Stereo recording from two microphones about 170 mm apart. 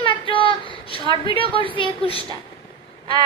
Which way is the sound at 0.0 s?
30° left (ahead or behind).